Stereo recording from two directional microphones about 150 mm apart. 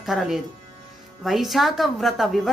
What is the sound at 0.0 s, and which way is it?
A woman's voice, centre (ahead or behind).